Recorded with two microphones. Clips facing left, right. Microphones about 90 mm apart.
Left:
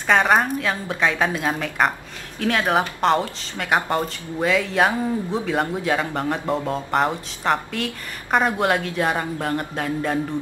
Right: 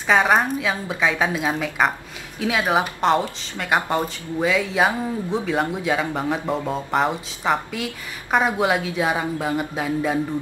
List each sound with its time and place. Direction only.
0.0 s speech: centre (ahead or behind)